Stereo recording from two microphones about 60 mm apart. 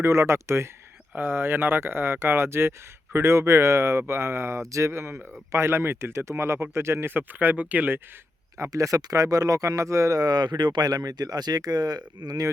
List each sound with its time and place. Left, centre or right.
0.0 s speech: right
1.1 s speech: right
4.9 s speech: right
8.7 s speech: right